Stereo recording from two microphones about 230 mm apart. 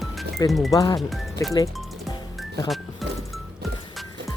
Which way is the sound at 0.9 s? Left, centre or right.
Centre.